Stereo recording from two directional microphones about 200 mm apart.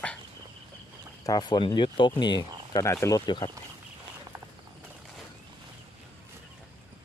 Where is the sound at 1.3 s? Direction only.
20° left (ahead or behind).